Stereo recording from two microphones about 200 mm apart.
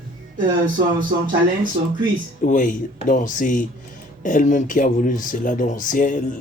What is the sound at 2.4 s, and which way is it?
Speech, 40° left (ahead or behind).